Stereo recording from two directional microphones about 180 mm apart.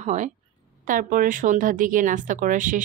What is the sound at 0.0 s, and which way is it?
Speech, 40° right (ahead or behind).